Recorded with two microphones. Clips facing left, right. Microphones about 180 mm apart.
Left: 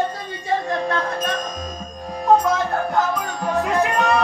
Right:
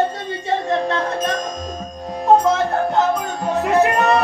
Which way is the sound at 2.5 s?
25° right (ahead or behind).